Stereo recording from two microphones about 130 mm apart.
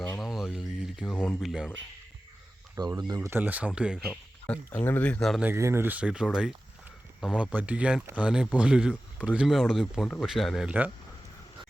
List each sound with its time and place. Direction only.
0.3 s a sound: centre (ahead or behind)
1.1 s speech: 5° left (ahead or behind)
2.8 s speech: 30° right (ahead or behind)
3.2 s speech: 15° right (ahead or behind)
4.1 s speech: 10° left (ahead or behind)
5.4 s speech: 20° right (ahead or behind)